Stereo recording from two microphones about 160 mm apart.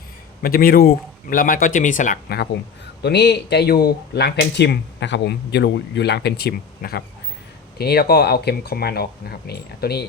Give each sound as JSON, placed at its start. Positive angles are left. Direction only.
{"t": 0.4, "sound": "speech", "side_deg": 65}
{"t": 3.0, "sound": "speech", "side_deg": 90}
{"t": 7.8, "sound": "speech", "side_deg": 75}